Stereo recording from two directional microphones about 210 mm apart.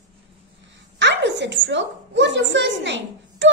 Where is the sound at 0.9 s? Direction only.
55° right (ahead or behind).